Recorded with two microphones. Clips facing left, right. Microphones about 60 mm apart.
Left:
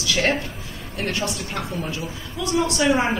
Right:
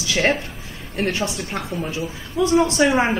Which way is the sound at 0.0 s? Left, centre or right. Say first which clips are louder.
Right 2 dB; right.